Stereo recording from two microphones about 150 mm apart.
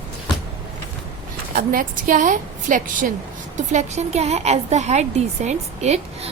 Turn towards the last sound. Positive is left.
turn(degrees=-45)  # may be behind; listen again after turning